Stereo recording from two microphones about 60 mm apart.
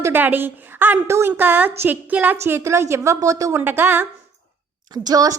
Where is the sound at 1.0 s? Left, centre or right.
Right.